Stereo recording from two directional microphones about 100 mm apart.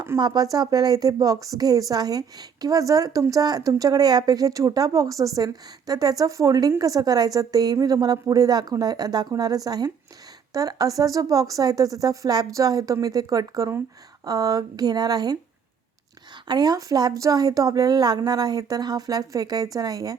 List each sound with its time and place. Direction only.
0.2 s a woman's voice: 40° right (ahead or behind)